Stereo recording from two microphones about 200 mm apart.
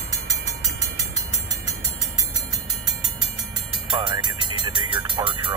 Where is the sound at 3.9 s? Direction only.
25° right (ahead or behind).